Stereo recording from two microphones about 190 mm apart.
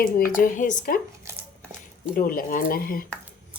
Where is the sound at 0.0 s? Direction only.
45° left (ahead or behind).